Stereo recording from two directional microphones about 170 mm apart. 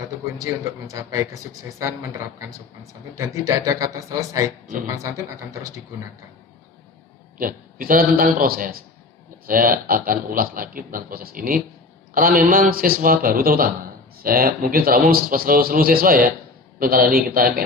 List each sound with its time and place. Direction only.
0.9 s a woman's voice: 20° right (ahead or behind)
7.3 s a man's voice: 55° right (ahead or behind)